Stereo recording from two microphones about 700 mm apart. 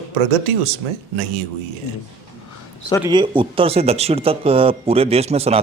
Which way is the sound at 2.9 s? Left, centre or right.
Centre.